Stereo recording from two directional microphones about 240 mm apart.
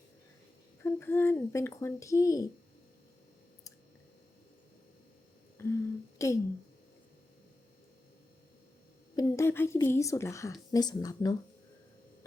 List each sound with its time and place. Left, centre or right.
0.8 s speech: centre
5.6 s a sound: centre
6.1 s speech: centre
9.1 s speech: centre